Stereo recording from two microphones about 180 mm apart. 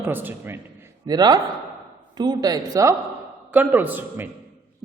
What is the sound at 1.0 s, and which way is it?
Speech, 20° right (ahead or behind).